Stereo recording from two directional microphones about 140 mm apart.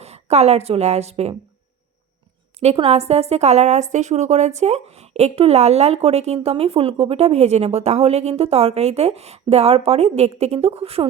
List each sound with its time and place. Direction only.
0.0 s a woman's voice: 50° right (ahead or behind)
2.6 s a woman's voice: 45° right (ahead or behind)